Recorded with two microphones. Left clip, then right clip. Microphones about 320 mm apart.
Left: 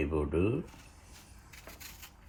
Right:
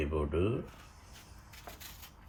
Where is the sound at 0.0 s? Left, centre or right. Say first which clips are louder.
Left 2 dB; left.